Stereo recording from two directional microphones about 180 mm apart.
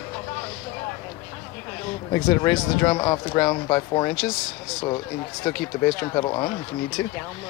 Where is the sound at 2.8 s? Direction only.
25° left (ahead or behind).